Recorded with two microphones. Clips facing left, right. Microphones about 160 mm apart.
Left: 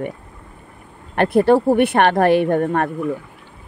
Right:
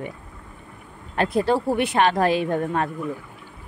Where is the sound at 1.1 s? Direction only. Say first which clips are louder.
Left 7 dB; 60° left (ahead or behind).